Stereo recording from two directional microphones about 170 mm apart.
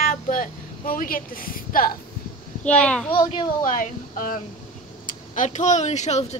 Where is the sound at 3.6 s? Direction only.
55° left (ahead or behind).